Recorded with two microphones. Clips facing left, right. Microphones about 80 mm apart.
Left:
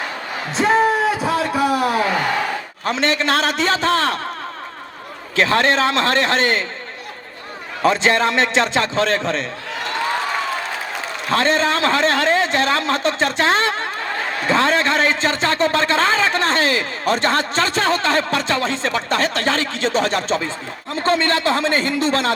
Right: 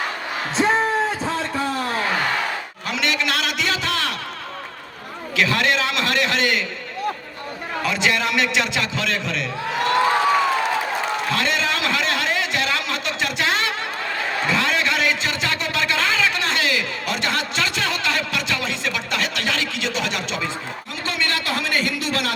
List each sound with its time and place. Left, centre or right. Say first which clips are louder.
0.5 s a sound: left 4 dB; centre
2.8 s a man's voice: left 5 dB; left
5.4 s a man's voice: left 4 dB; left
7.8 s a man's voice: left 6 dB; left
11.3 s a man's voice: left 9 dB; left